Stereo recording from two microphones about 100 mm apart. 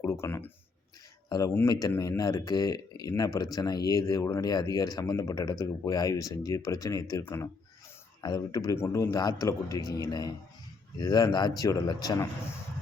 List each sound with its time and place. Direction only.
0.0 s speech: 30° left (ahead or behind)
1.6 s speech: 35° left (ahead or behind)
8.2 s speech: 40° left (ahead or behind)
8.7 s speech: 30° left (ahead or behind)